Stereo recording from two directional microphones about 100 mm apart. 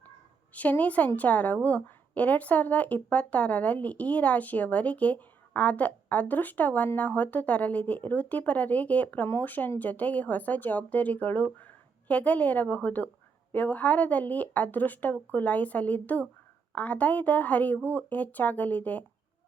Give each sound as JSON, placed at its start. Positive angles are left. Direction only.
{"t": 0.5, "sound": "a woman's voice", "side_deg": 15}